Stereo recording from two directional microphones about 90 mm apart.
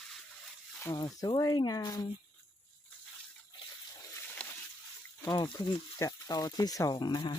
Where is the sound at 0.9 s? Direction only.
50° left (ahead or behind).